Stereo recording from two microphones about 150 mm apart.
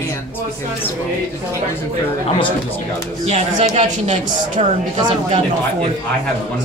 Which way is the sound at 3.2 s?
45° right (ahead or behind).